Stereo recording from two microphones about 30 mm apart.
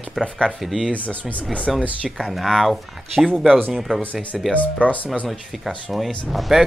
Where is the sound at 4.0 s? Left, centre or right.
Left.